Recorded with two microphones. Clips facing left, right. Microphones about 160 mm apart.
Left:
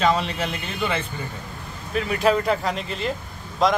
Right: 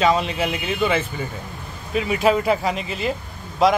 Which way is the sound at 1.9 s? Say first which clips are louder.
Right 2 dB; 5° right (ahead or behind).